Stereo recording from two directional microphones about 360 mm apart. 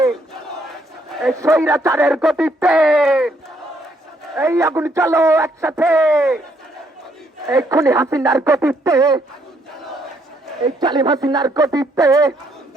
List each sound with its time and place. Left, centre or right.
1.2 s speech: centre
4.4 s speech: centre
7.4 s speech: centre
10.8 s speech: centre